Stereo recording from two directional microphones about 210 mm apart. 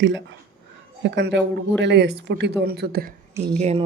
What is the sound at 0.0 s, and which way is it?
A woman's voice, 60° right (ahead or behind).